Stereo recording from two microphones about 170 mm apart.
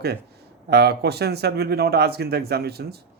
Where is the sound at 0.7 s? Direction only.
75° right (ahead or behind).